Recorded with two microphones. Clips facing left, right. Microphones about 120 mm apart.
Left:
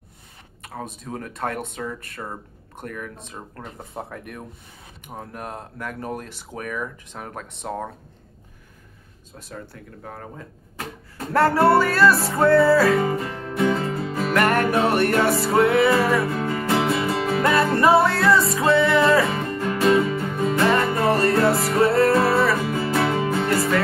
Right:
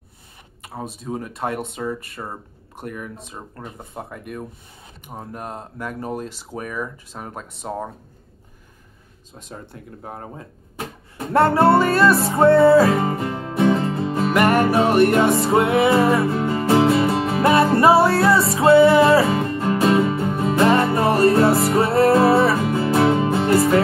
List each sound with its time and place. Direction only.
0.6 s speech: 10° right (ahead or behind)
9.5 s speech: 25° right (ahead or behind)
12.3 s music: 25° right (ahead or behind)
14.3 s music: 15° right (ahead or behind); by 23.8 s 30° right (ahead or behind)